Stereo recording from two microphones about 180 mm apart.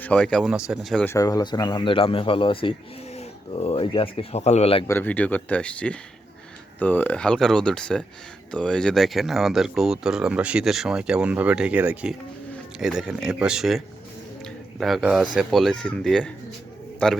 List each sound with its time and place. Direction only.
0.0 s speech: 5° left (ahead or behind)
1.0 s speech: 20° left (ahead or behind)
4.9 s speech: 10° left (ahead or behind)